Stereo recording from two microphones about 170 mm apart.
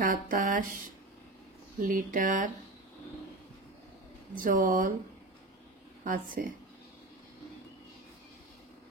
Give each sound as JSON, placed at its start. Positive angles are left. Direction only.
{"t": 0.0, "sound": "speech", "side_deg": -50}
{"t": 4.4, "sound": "speech", "side_deg": -50}
{"t": 6.0, "sound": "speech", "side_deg": -55}